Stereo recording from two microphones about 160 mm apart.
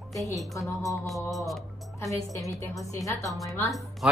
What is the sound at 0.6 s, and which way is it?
Speech, 20° left (ahead or behind).